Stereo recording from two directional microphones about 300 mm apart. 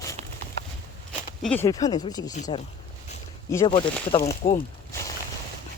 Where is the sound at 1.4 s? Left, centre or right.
Centre.